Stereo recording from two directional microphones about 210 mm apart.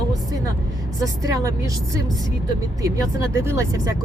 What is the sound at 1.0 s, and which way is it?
Speech, 15° right (ahead or behind).